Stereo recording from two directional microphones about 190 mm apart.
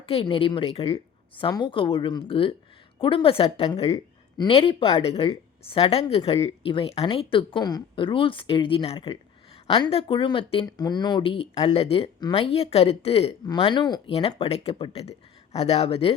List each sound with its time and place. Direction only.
0.1 s speech: 30° left (ahead or behind)
3.8 s speech: 20° left (ahead or behind)